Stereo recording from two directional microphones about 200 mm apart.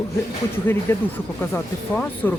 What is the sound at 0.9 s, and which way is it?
Speech, 10° left (ahead or behind).